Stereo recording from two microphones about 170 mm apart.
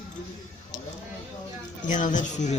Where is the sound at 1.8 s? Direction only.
50° left (ahead or behind).